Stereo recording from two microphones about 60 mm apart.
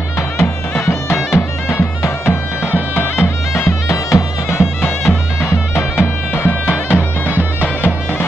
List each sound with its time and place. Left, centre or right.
0.7 s music: left